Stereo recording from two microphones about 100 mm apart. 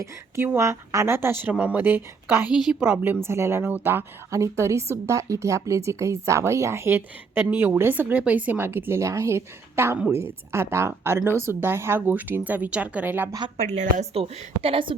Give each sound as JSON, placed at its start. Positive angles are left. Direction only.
{"t": 0.0, "sound": "a woman's voice", "side_deg": -25}
{"t": 2.5, "sound": "a woman's voice", "side_deg": -5}
{"t": 3.2, "sound": "a woman's voice", "side_deg": -25}
{"t": 14.0, "sound": "a woman's voice", "side_deg": -85}